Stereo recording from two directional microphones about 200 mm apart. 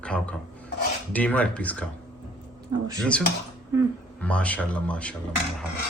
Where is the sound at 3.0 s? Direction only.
5° left (ahead or behind).